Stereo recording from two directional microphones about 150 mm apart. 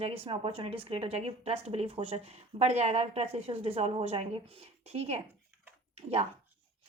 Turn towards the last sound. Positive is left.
turn(degrees=-45)  # may be behind; listen again after turning